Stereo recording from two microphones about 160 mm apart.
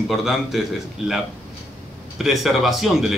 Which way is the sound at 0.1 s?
Centre (ahead or behind).